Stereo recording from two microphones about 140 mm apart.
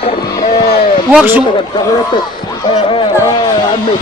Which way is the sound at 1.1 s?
15° right (ahead or behind).